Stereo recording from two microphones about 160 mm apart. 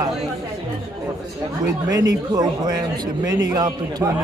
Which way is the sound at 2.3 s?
25° right (ahead or behind).